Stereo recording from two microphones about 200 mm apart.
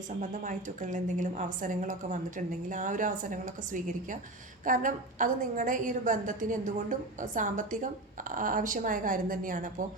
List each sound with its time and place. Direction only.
0.2 s a woman's voice: 40° right (ahead or behind)